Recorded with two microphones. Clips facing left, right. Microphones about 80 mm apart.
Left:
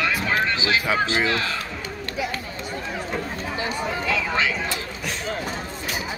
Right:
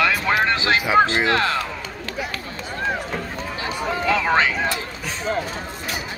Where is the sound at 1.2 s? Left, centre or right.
Right.